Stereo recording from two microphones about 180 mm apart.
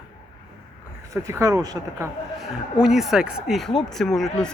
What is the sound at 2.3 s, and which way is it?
Speech, 5° right (ahead or behind).